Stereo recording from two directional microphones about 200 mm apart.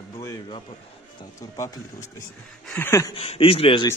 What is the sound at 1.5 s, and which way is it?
A man's voice, 15° left (ahead or behind).